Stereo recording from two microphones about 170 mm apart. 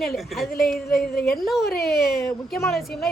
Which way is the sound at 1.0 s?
60° left (ahead or behind).